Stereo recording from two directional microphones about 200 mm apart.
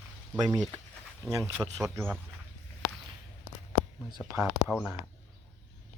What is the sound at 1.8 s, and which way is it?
Speech, 15° right (ahead or behind).